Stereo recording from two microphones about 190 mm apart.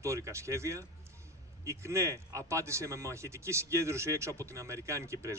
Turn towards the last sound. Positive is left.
turn(degrees=-15)  # may be behind; listen again after turning